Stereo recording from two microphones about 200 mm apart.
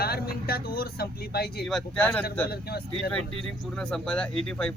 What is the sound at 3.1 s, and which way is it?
Speech, 5° left (ahead or behind).